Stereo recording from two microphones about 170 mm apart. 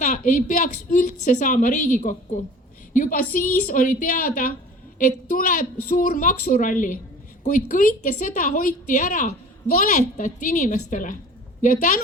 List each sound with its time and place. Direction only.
0.0 s a woman's voice: 45° left (ahead or behind)